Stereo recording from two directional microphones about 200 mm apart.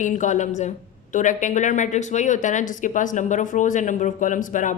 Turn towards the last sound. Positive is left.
turn(degrees=40)  # may be behind; listen again after turning